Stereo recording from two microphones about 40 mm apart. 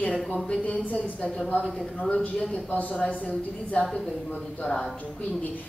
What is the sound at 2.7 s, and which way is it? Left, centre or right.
Speech, left.